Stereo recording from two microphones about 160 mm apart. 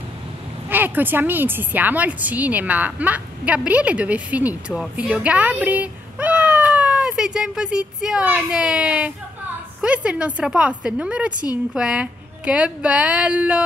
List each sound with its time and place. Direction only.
0.7 s a woman's voice: 10° right (ahead or behind)